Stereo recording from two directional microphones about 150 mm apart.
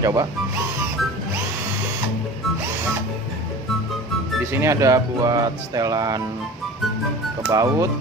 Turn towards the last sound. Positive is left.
turn(degrees=-20)  # may be behind; listen again after turning